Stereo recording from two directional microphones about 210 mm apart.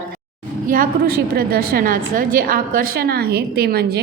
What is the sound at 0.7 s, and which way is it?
A woman's voice, 45° right (ahead or behind).